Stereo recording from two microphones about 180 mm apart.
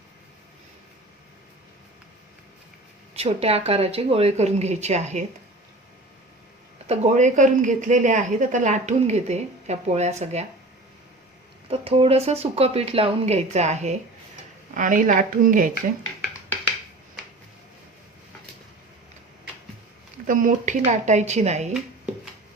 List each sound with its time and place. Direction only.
3.2 s a woman's voice: 35° right (ahead or behind)
6.8 s a woman's voice: 35° right (ahead or behind)
11.7 s a woman's voice: 35° right (ahead or behind)
20.2 s a woman's voice: 45° right (ahead or behind)